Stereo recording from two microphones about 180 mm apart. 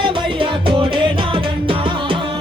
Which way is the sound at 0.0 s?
25° right (ahead or behind).